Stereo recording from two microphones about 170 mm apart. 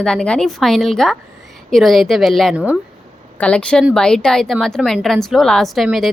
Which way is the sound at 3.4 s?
5° left (ahead or behind).